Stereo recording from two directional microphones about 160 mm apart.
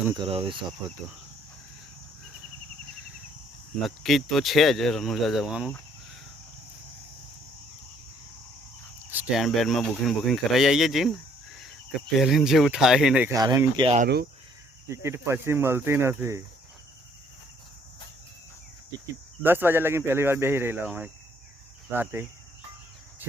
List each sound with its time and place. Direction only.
0.2 s speech: 35° right (ahead or behind)
3.8 s speech: centre (ahead or behind)
9.0 s cricket: 10° right (ahead or behind)
9.4 s speech: centre (ahead or behind)
13.3 s speech: 25° right (ahead or behind)
18.9 s speech: 20° right (ahead or behind)